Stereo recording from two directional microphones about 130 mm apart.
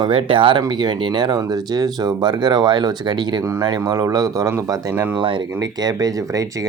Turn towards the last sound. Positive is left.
turn(degrees=-25)  # may be behind; listen again after turning